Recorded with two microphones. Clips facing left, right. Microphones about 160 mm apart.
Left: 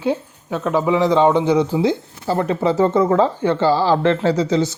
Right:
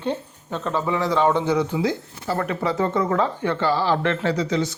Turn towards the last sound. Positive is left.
turn(degrees=30)  # may be behind; listen again after turning